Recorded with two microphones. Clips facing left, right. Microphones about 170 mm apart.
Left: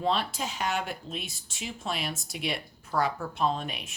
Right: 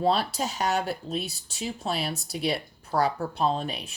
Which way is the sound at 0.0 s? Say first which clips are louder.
Right 4 dB; 40° right (ahead or behind).